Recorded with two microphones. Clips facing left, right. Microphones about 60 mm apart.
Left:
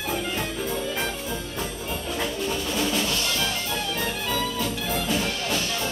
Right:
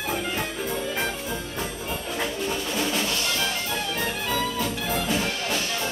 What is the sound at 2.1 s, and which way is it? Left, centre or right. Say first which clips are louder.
Music: even; right.